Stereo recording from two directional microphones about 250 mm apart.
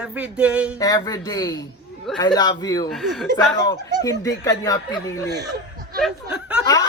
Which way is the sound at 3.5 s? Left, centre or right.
Centre.